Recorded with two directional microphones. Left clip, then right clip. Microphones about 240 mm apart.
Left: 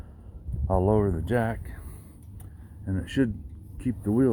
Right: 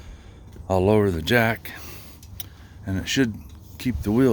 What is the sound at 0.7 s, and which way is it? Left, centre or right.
Speech, right.